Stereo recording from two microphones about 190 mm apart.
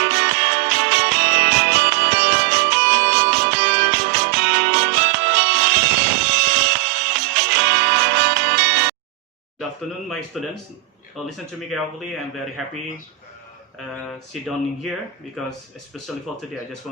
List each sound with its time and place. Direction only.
0.0 s music: 70° right (ahead or behind)
10.3 s speech: centre (ahead or behind)
14.4 s speech: centre (ahead or behind)